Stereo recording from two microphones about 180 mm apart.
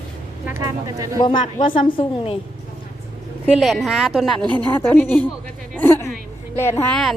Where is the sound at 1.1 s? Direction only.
25° left (ahead or behind).